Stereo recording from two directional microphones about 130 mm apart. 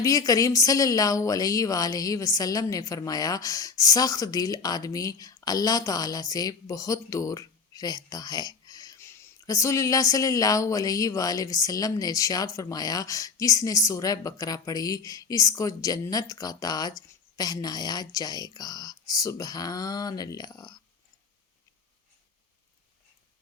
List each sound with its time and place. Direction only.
0.0 s speech: 25° left (ahead or behind)